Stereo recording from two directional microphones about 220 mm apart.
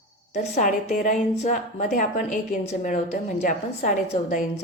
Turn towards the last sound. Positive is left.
turn(degrees=35)  # may be behind; listen again after turning